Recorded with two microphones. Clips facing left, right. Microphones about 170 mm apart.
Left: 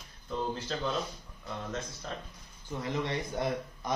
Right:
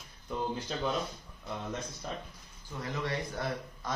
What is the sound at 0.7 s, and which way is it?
Speech, 10° right (ahead or behind).